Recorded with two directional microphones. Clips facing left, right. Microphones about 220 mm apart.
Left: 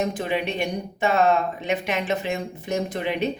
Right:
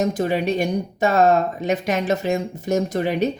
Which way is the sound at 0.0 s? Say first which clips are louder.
Right 4 dB; 40° right (ahead or behind).